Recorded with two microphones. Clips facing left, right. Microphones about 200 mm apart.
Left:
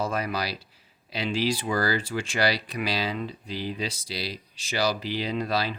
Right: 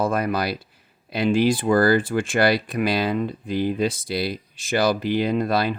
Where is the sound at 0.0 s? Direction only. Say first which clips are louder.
Right 6 dB; 55° right (ahead or behind).